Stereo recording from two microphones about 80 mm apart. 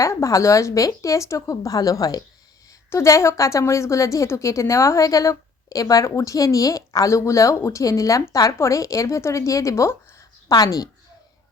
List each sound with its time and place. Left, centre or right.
0.0 s a woman's voice: left
2.9 s a woman's voice: left
10.5 s a woman's voice: left